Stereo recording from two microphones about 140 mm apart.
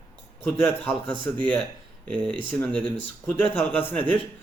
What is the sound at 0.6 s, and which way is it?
Speech, 15° left (ahead or behind).